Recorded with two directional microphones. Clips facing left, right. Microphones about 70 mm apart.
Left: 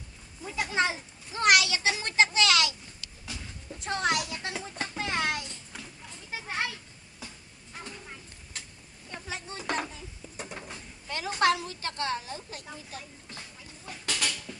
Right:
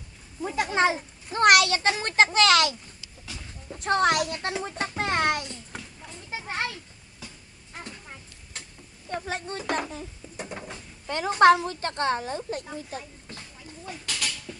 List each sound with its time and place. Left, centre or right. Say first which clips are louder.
0.4 s a child's voice: right 5 dB; right
4.8 s a sound: right 5 dB; right
6.5 s a child's voice: right 2 dB; right
9.0 s speech: right 7 dB; right
10.4 s a sound: right 4 dB; centre
11.0 s a woman's voice: right 8 dB; right